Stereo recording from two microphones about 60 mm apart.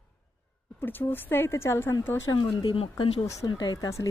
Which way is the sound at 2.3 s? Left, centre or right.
Left.